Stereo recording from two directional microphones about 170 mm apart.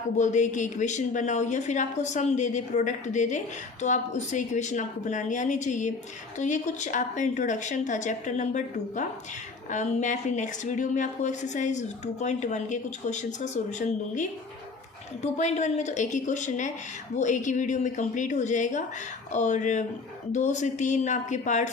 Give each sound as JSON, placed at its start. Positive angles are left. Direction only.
{"t": 0.2, "sound": "a woman's voice", "side_deg": 45}